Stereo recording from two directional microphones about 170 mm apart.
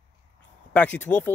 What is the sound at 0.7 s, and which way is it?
Speech, 10° left (ahead or behind).